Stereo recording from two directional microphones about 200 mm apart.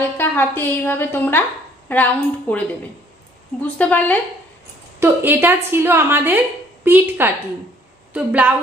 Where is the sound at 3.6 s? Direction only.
10° left (ahead or behind).